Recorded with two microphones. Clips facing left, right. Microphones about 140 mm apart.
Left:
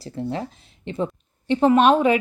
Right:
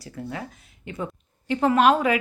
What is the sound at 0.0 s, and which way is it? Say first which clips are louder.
Speech: left 6 dB; 30° left (ahead or behind).